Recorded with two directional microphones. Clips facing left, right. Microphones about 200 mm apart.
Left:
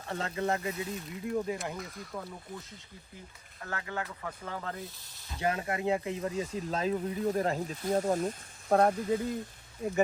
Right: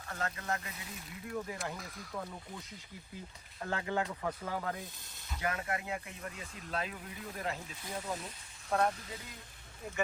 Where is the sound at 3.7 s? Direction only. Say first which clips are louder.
Right 3 dB; 20° right (ahead or behind).